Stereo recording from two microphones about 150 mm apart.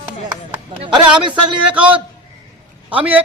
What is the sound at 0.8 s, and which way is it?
Speech, 30° right (ahead or behind).